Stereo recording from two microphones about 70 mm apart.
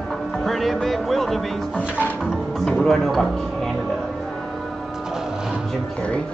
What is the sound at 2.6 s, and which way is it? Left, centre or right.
Music, centre.